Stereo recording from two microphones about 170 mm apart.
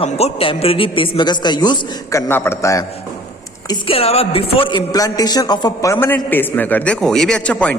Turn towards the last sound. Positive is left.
turn(degrees=5)  # may be behind; listen again after turning